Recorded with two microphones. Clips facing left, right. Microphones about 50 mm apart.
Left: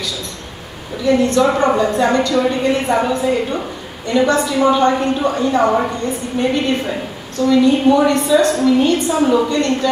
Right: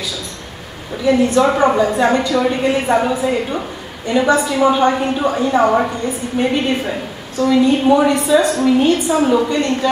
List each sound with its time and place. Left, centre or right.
1.0 s a woman's voice: centre